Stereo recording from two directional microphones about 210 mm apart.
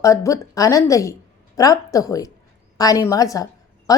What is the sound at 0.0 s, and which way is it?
A woman's voice, 15° left (ahead or behind).